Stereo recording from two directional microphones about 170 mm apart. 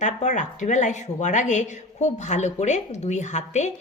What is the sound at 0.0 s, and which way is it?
A woman's voice, 45° left (ahead or behind).